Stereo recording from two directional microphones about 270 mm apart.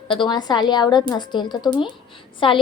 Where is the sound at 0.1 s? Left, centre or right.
Centre.